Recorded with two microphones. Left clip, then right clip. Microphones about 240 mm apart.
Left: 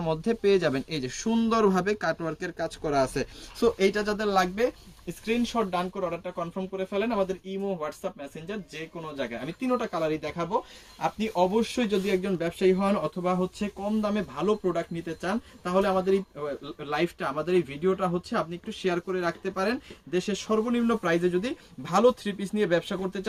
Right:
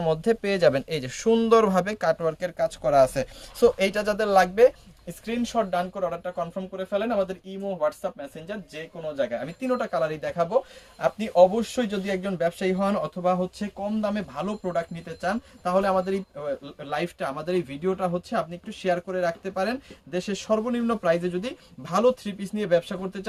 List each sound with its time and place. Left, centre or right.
0.0 s speech: right
5.2 s speech: right